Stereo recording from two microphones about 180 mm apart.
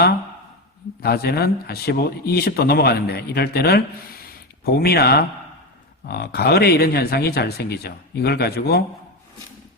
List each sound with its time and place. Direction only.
1.0 s speech: 60° left (ahead or behind)